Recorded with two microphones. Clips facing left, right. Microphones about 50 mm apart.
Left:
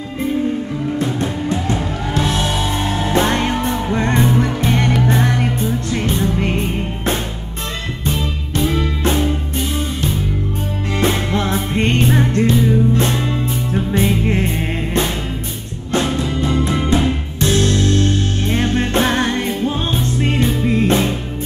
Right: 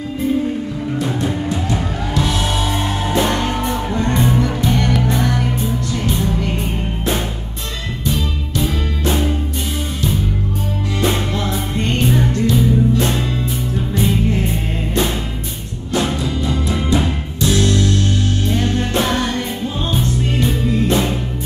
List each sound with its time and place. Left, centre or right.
1.2 s music: left
8.0 s music: left
11.0 s music: left
13.1 s music: centre
13.7 s music: left
16.2 s music: left